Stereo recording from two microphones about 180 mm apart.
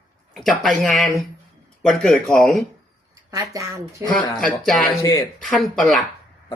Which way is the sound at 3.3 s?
20° right (ahead or behind).